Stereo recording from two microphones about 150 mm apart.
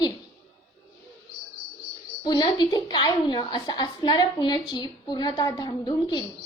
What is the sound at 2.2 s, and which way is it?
A woman's voice, 30° left (ahead or behind).